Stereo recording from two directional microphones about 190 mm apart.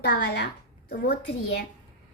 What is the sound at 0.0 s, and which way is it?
A woman's voice, 60° left (ahead or behind).